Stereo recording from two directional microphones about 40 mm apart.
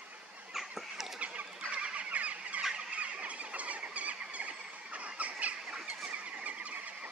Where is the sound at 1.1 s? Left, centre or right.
Right.